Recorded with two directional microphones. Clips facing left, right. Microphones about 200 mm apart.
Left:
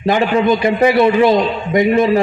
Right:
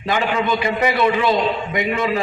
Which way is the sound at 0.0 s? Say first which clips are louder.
Left 7 dB; 45° left (ahead or behind).